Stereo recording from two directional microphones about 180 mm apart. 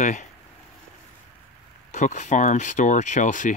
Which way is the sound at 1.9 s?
40° left (ahead or behind).